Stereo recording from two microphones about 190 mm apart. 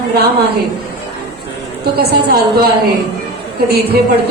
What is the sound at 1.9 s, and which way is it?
A woman's voice, 55° right (ahead or behind).